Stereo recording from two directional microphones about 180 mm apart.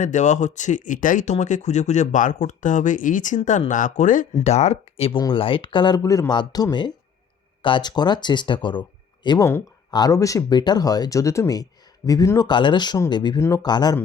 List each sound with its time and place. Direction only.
0.0 s speech: 45° left (ahead or behind); by 14.0 s 25° left (ahead or behind)